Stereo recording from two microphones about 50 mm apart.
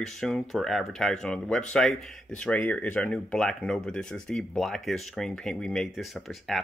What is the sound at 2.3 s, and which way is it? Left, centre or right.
Speech, left.